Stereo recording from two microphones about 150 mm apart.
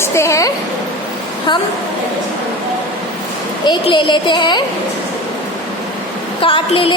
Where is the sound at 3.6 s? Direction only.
30° left (ahead or behind).